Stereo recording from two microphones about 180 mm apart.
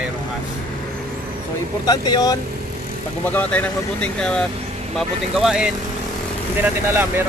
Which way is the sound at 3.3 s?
5° left (ahead or behind).